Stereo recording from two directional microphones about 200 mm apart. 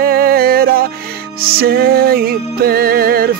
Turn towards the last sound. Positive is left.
turn(degrees=-50)  # may be behind; listen again after turning